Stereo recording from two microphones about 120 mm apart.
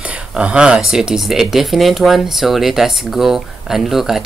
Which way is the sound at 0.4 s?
10° right (ahead or behind).